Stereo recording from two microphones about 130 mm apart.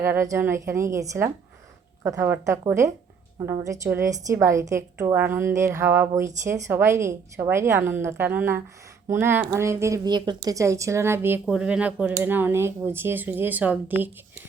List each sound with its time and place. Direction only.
0.0 s a woman's voice: 20° right (ahead or behind)
11.4 s speech: 5° right (ahead or behind)